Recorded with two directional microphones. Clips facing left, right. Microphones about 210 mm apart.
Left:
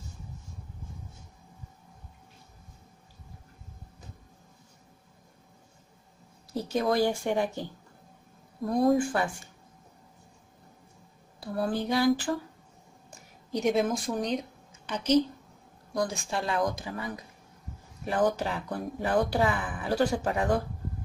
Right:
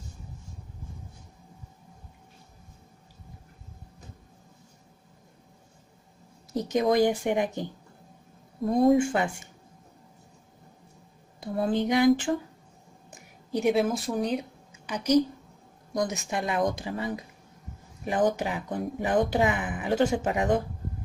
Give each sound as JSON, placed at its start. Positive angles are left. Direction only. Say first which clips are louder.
{"t": 6.5, "sound": "speech", "louder": "right 3 dB", "side_deg": -15}
{"t": 11.3, "sound": "speech", "louder": "right 3 dB", "side_deg": -20}
{"t": 13.1, "sound": "speech", "louder": "right 2 dB", "side_deg": -10}